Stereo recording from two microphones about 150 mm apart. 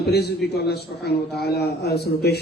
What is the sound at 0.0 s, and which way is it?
A man's voice, 90° left.